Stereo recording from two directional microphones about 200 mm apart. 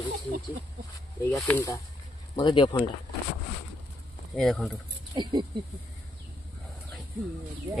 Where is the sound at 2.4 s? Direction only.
20° left (ahead or behind).